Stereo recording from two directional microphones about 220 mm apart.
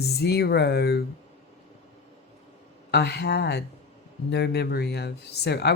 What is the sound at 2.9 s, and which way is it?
Speech, 50° left (ahead or behind).